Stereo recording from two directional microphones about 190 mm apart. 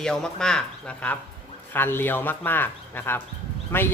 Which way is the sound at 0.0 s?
5° left (ahead or behind).